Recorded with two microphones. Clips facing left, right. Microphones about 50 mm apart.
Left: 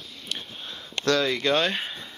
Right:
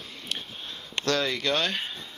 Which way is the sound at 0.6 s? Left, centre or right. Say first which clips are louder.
Left 1 dB; centre.